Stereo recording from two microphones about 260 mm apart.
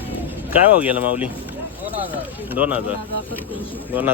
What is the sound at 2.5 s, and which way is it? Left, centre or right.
Speech, centre.